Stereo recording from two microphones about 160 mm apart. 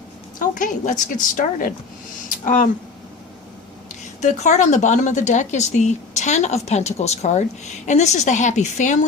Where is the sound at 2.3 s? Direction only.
55° left (ahead or behind).